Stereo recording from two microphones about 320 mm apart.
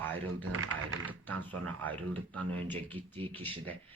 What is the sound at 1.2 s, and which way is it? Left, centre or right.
Speech, centre.